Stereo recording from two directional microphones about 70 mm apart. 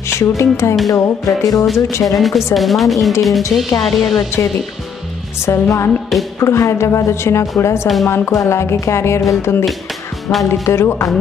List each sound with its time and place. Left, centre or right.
0.1 s music: left
2.1 s speech: centre
5.4 s music: left
6.1 s a woman's voice: centre
6.4 s a woman's voice: left
7.8 s speech: centre
8.3 s music: left
8.5 s a woman's voice: left